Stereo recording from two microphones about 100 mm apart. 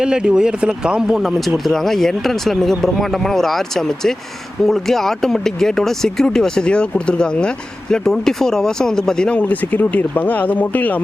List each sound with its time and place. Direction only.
0.0 s speech: 10° right (ahead or behind); by 11.0 s 15° left (ahead or behind)